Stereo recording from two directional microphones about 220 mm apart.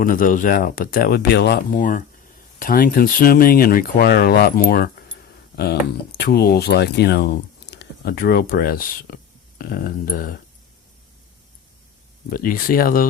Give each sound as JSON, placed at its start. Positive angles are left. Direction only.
{"t": 0.0, "sound": "speech", "side_deg": 40}
{"t": 6.1, "sound": "speech", "side_deg": 45}
{"t": 12.3, "sound": "speech", "side_deg": 40}